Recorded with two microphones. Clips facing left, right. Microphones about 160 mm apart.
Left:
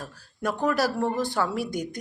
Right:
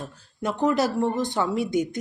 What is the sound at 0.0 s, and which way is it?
Speech, 20° right (ahead or behind).